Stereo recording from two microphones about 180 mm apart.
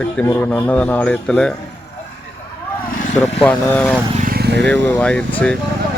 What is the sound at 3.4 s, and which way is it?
Speech, 10° left (ahead or behind).